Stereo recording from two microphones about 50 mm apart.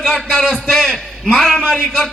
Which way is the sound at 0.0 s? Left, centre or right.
Centre.